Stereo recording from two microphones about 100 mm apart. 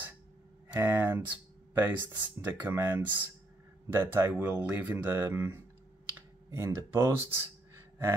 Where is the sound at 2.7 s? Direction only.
20° right (ahead or behind).